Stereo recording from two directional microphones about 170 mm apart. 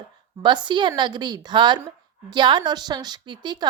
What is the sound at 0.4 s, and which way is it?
A woman's voice, 25° right (ahead or behind).